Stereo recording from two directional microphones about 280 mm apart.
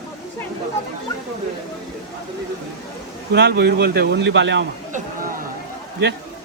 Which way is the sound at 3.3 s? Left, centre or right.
Right.